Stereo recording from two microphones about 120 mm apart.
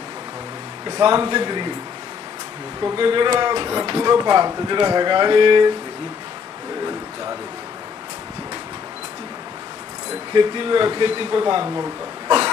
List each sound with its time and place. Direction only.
0.9 s speech: 30° right (ahead or behind)
3.0 s speech: 40° right (ahead or behind)
10.3 s speech: 40° right (ahead or behind)